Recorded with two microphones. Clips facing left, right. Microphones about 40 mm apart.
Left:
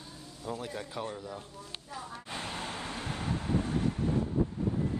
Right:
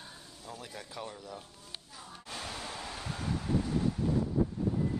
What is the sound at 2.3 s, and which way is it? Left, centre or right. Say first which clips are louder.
Vehicle: left 2 dB; left.